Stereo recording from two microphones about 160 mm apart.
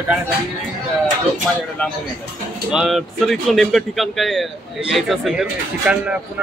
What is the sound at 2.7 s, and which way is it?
Speech, centre (ahead or behind).